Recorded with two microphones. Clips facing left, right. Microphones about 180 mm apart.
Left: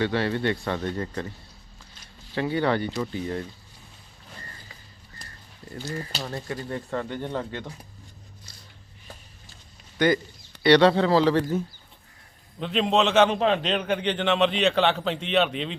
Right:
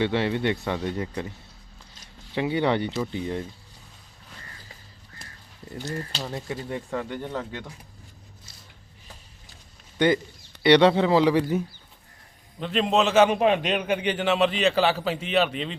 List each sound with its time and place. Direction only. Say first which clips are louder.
0.0 s speech: right 1 dB; 20° right (ahead or behind)
2.3 s speech: right 1 dB; 20° right (ahead or behind)
5.8 s speech: even; 10° left (ahead or behind)
6.2 s speech: even; 5° right (ahead or behind)
10.6 s speech: even; 15° right (ahead or behind)
12.5 s a man's voice: even; centre (ahead or behind)